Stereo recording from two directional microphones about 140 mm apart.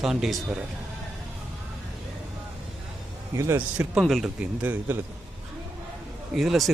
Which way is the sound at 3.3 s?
20° right (ahead or behind).